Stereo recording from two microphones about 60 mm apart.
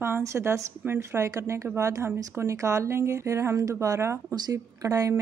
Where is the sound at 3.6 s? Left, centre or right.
Right.